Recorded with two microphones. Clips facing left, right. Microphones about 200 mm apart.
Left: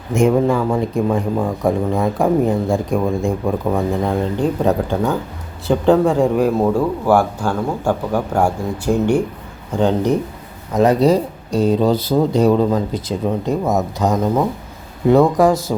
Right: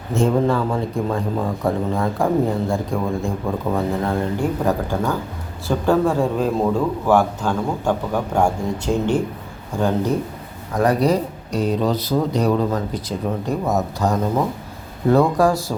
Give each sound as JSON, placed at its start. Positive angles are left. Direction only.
{"t": 0.1, "sound": "speech", "side_deg": 15}
{"t": 9.7, "sound": "speech", "side_deg": 20}